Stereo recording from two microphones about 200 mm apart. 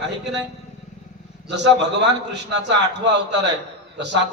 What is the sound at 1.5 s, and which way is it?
A man's voice, 60° right (ahead or behind).